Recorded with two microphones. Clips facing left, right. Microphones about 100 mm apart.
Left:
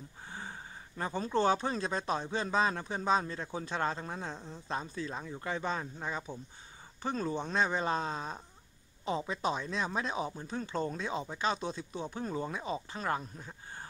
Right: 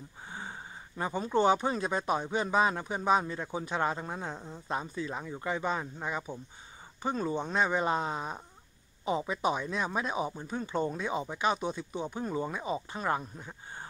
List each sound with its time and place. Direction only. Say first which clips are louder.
0.3 s speech: right 2 dB; 15° right (ahead or behind)